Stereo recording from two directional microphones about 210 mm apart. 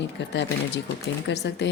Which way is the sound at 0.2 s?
55° left (ahead or behind).